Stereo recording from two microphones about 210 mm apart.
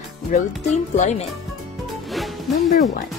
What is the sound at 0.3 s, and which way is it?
Speech, 35° left (ahead or behind).